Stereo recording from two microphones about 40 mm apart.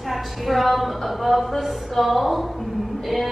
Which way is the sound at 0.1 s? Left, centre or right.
Centre.